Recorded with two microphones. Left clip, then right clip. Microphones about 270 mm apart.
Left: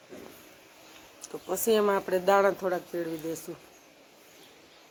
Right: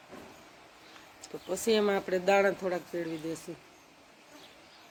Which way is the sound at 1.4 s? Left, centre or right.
Centre.